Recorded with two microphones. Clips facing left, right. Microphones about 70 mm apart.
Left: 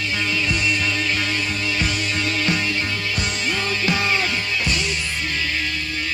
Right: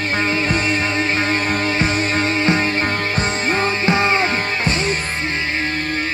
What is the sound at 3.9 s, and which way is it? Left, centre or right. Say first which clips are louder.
Music: right 5 dB; right.